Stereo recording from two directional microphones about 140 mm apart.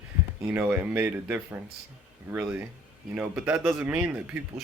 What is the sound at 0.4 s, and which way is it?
Speech, 10° right (ahead or behind).